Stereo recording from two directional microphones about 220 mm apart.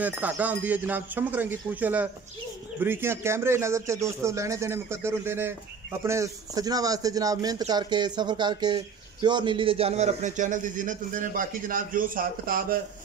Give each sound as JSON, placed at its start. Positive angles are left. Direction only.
{"t": 0.0, "sound": "a man's voice", "side_deg": -5}